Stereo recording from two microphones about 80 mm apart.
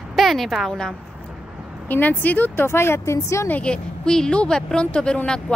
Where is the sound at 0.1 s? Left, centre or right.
Centre.